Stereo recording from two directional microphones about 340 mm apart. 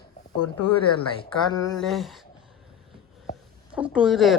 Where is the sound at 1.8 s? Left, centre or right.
Centre.